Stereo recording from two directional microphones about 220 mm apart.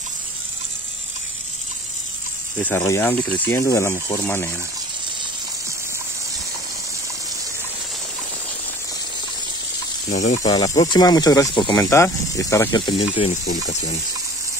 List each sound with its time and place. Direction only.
2.6 s speech: 10° left (ahead or behind)
10.0 s speech: 35° left (ahead or behind)
10.4 s speech: 15° left (ahead or behind)
13.3 s speech: 35° left (ahead or behind)